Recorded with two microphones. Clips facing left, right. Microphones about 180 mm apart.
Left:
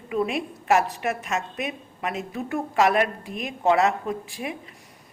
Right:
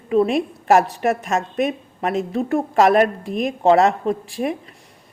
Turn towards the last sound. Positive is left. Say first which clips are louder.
# right 8 dB
turn(degrees=-35)  # may be behind; listen again after turning